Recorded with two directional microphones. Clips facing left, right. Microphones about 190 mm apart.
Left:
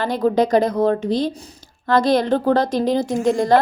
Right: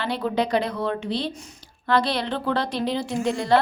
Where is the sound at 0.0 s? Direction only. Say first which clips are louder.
Left 7 dB; 45° left (ahead or behind).